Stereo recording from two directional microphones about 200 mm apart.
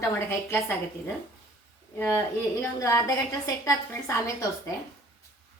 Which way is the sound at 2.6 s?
15° left (ahead or behind).